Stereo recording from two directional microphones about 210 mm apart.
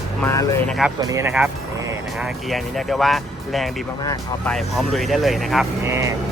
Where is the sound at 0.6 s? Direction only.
Centre (ahead or behind).